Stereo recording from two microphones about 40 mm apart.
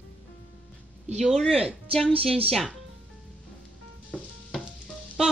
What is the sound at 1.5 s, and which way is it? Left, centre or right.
Speech, right.